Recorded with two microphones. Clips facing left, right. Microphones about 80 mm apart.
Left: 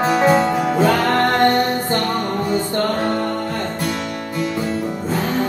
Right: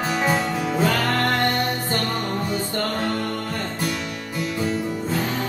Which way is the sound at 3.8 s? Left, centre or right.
Centre.